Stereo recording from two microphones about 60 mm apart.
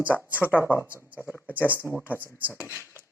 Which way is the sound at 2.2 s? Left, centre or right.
Right.